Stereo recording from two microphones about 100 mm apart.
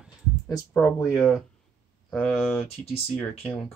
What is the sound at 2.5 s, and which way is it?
Speech, 80° left.